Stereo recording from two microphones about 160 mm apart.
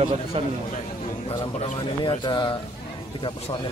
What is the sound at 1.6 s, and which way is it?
Speech, 35° left (ahead or behind).